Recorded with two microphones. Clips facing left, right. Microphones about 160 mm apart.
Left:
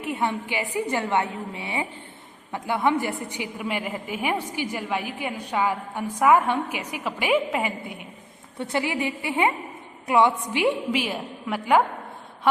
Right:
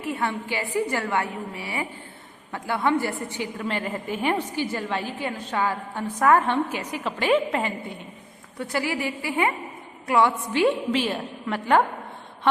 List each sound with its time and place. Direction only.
0.0 s a woman's voice: 20° left (ahead or behind)
8.5 s a woman's voice: 25° left (ahead or behind)